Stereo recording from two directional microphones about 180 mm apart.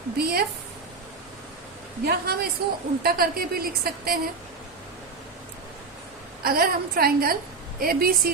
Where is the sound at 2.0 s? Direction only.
60° right (ahead or behind).